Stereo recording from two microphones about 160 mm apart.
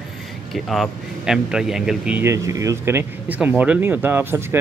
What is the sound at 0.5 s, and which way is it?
Speech, centre (ahead or behind).